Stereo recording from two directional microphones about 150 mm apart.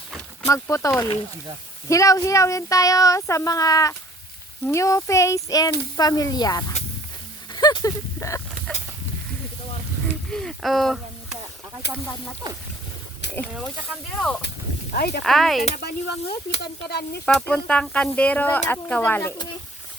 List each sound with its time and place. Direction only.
0.4 s speech: 20° left (ahead or behind)
7.5 s a sound: 30° left (ahead or behind)
10.3 s a sound: centre (ahead or behind)
14.9 s speech: 90° left
15.2 s speech: centre (ahead or behind)
15.7 s speech: 90° left
17.2 s speech: 5° left (ahead or behind)